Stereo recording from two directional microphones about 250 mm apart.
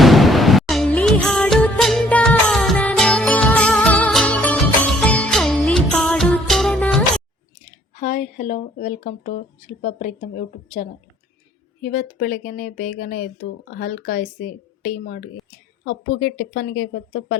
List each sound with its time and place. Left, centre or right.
0.0 s music: centre
7.9 s speech: left